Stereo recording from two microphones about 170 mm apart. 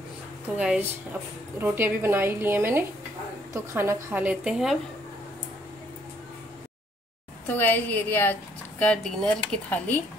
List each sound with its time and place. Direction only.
0.6 s a woman's voice: 5° right (ahead or behind)
7.4 s speech: 10° left (ahead or behind)